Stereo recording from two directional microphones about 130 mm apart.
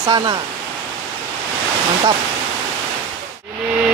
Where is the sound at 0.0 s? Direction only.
30° right (ahead or behind).